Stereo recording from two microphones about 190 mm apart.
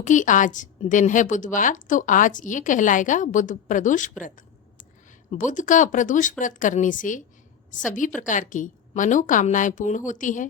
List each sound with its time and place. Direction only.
0.0 s a woman's voice: 40° left (ahead or behind)
5.3 s a woman's voice: 40° left (ahead or behind)